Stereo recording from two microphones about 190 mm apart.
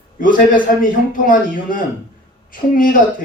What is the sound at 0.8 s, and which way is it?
A man's voice, 45° left (ahead or behind).